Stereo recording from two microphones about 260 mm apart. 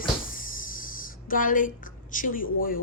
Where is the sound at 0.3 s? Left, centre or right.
Left.